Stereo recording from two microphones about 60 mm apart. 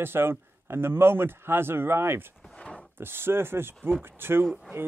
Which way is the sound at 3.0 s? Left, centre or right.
Right.